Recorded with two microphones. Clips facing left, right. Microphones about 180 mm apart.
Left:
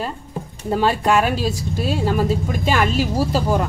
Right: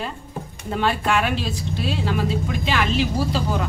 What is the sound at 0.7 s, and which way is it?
A woman's voice, 40° left (ahead or behind).